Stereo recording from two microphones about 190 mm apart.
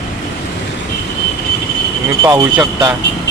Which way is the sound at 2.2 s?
20° right (ahead or behind).